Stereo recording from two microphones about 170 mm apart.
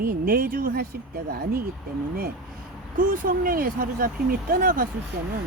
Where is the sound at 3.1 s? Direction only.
55° right (ahead or behind).